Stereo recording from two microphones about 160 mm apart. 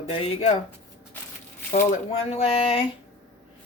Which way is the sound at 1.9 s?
40° left (ahead or behind).